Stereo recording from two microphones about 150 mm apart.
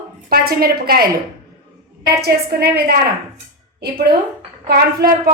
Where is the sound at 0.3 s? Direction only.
90° right.